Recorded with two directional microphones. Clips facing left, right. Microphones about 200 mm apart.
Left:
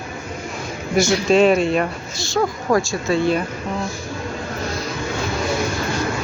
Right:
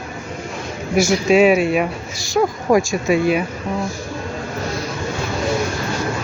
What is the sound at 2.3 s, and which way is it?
Speech, 15° right (ahead or behind).